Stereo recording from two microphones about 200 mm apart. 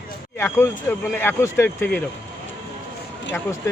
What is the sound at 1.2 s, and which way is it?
Speech, 10° left (ahead or behind).